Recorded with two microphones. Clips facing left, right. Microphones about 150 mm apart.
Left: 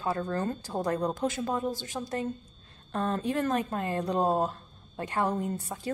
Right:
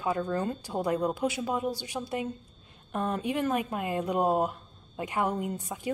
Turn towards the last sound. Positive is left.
turn(degrees=-10)  # may be behind; listen again after turning